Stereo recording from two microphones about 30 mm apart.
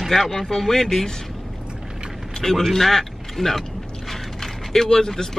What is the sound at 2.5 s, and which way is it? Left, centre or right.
Speech, centre.